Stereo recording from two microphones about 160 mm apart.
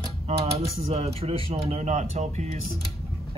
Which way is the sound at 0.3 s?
35° right (ahead or behind).